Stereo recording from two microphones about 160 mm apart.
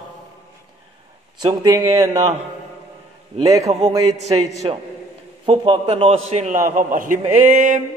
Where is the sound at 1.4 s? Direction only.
25° right (ahead or behind).